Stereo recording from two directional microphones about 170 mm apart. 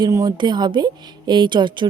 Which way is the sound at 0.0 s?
25° right (ahead or behind).